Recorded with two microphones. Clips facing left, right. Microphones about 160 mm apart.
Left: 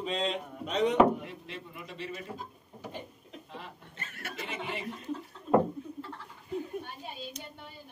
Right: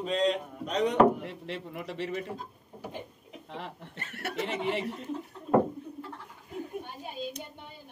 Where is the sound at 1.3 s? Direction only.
70° right (ahead or behind).